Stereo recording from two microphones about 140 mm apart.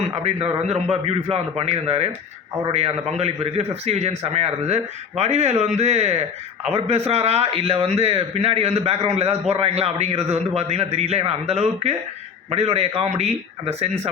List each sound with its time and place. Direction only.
0.2 s a man's voice: 50° right (ahead or behind)